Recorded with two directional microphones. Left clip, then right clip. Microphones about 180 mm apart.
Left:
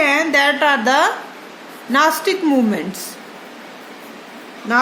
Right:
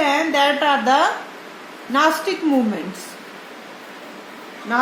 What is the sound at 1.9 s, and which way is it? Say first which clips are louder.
Speech: left 2 dB; 40° left (ahead or behind).